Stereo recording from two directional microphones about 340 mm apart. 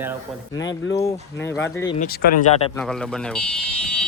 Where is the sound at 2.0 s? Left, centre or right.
Left.